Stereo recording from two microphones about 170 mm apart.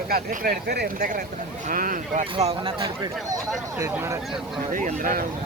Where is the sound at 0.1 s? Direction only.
60° right (ahead or behind).